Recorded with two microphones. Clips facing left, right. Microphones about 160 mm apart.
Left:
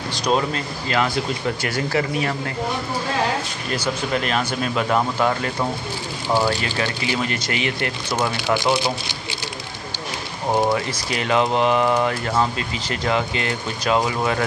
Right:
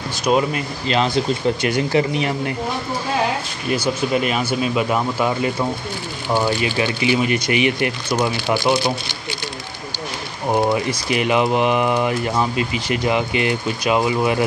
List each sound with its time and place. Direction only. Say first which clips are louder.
0.2 s speech: right 3 dB; 5° right (ahead or behind)
0.8 s speech: right 3 dB; 25° right (ahead or behind)
3.7 s speech: right 4 dB; 10° right (ahead or behind)
10.7 s speech: right 3 dB; 15° right (ahead or behind)